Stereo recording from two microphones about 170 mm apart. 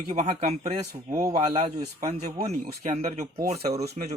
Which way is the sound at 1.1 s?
20° right (ahead or behind).